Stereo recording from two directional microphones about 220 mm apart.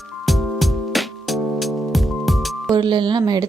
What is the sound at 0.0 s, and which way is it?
Music, centre (ahead or behind).